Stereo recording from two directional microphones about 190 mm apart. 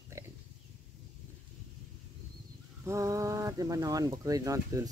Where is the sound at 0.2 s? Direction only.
15° right (ahead or behind).